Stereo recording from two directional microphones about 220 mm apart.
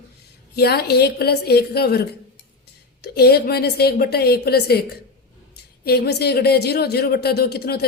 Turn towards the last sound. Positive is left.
turn(degrees=45)  # may be behind; listen again after turning